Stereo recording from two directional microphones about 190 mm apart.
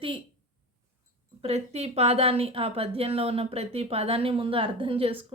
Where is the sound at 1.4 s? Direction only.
35° right (ahead or behind).